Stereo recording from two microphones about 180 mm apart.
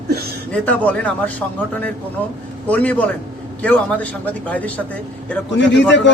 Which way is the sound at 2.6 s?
10° left (ahead or behind).